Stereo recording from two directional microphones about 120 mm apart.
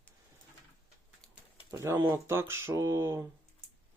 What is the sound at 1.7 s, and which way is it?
Speech, 25° right (ahead or behind).